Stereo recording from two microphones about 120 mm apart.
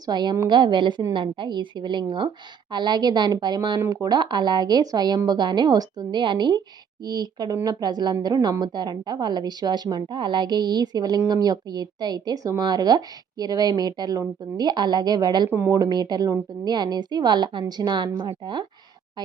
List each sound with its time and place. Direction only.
0.0 s speech: 35° right (ahead or behind)
15.4 s speech: 20° right (ahead or behind)
15.8 s speech: 35° right (ahead or behind)